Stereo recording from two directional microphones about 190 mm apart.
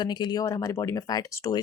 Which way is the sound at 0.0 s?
20° left (ahead or behind).